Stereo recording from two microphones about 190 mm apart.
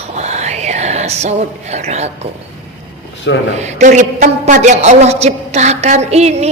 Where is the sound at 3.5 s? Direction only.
35° right (ahead or behind).